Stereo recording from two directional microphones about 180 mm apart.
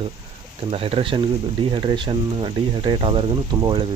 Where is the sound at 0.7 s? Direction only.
30° right (ahead or behind).